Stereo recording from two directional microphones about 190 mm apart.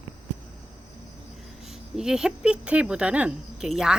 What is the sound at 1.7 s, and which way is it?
Speech, centre (ahead or behind).